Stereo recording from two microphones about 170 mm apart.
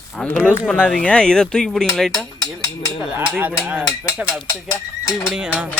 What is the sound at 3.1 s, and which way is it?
Cowbell, 10° right (ahead or behind).